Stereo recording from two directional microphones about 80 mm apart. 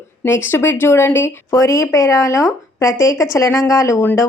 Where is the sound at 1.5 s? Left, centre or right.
Left.